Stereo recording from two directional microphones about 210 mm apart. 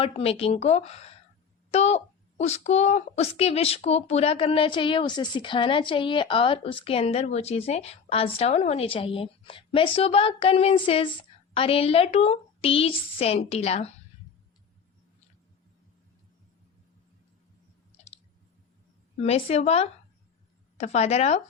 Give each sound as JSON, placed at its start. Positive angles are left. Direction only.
{"t": 0.0, "sound": "speech", "side_deg": 30}
{"t": 17.9, "sound": "clicking", "side_deg": 30}
{"t": 19.1, "sound": "speech", "side_deg": 30}